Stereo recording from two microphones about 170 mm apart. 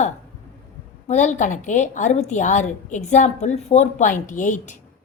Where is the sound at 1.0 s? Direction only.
45° left (ahead or behind).